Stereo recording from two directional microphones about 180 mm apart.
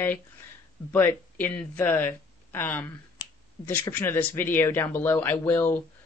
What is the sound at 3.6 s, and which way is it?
Speech, 15° left (ahead or behind).